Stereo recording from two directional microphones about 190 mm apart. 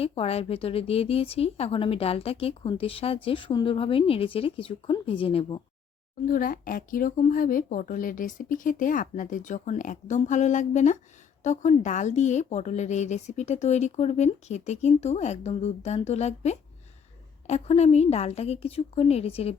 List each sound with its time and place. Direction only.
0.0 s speech: 30° left (ahead or behind)
6.2 s a woman's voice: 50° left (ahead or behind); by 19.5 s 30° left (ahead or behind)